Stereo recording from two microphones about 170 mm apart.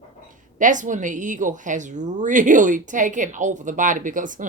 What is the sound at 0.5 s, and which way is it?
Speech, 50° right (ahead or behind).